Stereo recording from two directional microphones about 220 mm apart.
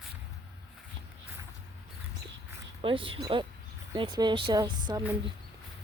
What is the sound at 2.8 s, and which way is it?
Speech, 25° right (ahead or behind).